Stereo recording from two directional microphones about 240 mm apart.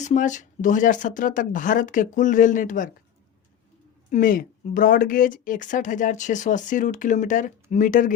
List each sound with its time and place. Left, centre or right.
0.0 s speech: left
4.1 s speech: left